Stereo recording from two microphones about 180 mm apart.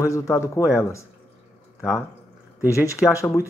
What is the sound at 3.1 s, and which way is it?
Speech, 15° left (ahead or behind).